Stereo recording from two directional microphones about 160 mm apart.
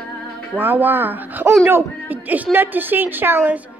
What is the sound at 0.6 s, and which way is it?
A woman's voice, 10° right (ahead or behind).